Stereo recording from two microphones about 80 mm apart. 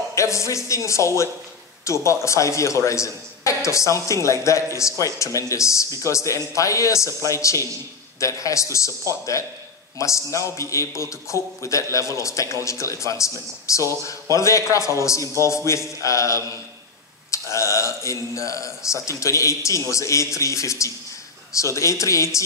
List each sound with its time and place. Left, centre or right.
0.1 s a man's voice: left
9.9 s a man's voice: left